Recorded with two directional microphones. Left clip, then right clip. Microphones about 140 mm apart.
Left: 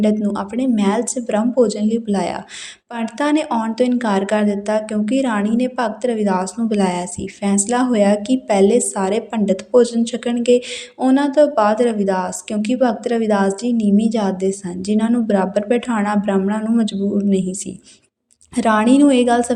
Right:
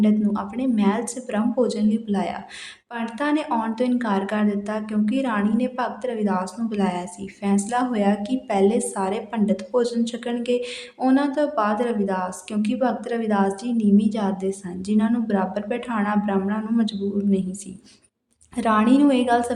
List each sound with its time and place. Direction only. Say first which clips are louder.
0.0 s a woman's voice: left 4 dB; 40° left (ahead or behind)